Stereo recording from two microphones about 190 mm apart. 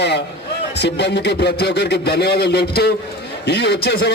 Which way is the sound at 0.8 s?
60° left (ahead or behind).